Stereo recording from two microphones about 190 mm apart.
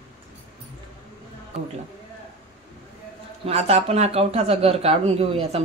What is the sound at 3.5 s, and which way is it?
Speech, 35° right (ahead or behind).